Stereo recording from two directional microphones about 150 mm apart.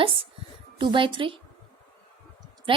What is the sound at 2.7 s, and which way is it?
Speech, 35° right (ahead or behind).